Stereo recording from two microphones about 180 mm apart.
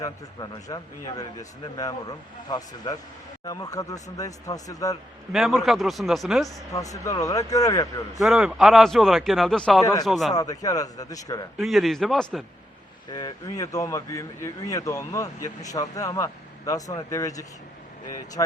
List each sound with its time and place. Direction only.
0.0 s a man's voice: 20° left (ahead or behind)
5.3 s speech: centre (ahead or behind)
6.7 s a man's voice: 20° left (ahead or behind)
8.2 s speech: 5° right (ahead or behind)
9.8 s a man's voice: 20° left (ahead or behind)
10.1 s speech: centre (ahead or behind)
10.3 s a man's voice: 20° left (ahead or behind)
11.5 s speech: centre (ahead or behind)
13.1 s a man's voice: 20° left (ahead or behind)